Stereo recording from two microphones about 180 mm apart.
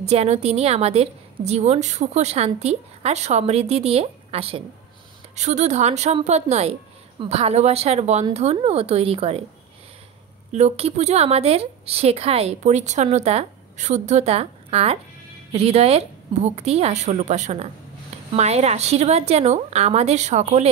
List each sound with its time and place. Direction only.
0.0 s a woman's voice: 35° right (ahead or behind)
10.5 s a woman's voice: 35° right (ahead or behind)